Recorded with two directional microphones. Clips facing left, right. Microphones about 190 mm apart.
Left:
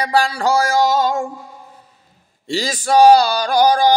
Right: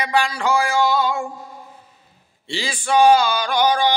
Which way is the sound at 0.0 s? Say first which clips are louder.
Left 3 dB; 35° left (ahead or behind).